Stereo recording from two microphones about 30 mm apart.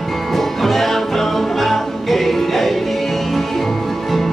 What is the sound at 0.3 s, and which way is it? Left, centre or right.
Music, centre.